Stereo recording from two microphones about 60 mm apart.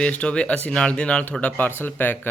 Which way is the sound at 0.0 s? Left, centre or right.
Centre.